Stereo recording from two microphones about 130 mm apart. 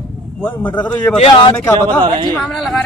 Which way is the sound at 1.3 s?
30° left (ahead or behind).